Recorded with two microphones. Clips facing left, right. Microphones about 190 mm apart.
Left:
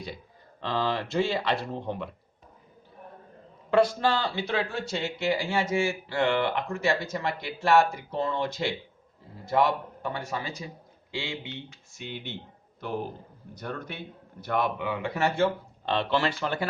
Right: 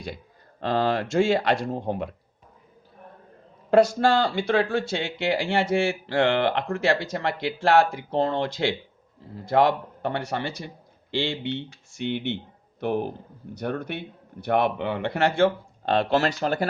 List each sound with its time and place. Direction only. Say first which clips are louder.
0.6 s speech: right 5 dB; 50° right (ahead or behind)
3.7 s speech: right 4 dB; 45° right (ahead or behind)
4.7 s speech: right 5 dB; 90° right
8.2 s a man's voice: right 4 dB; 70° right (ahead or behind)
15.9 s speech: right 4 dB; 45° right (ahead or behind)